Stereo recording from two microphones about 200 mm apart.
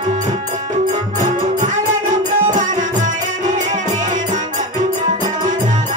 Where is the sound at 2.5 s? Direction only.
40° right (ahead or behind).